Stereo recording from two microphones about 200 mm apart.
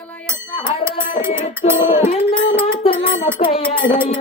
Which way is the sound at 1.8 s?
40° left (ahead or behind).